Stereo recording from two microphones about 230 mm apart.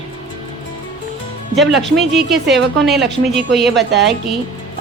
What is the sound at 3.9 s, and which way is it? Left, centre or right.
Speech, right.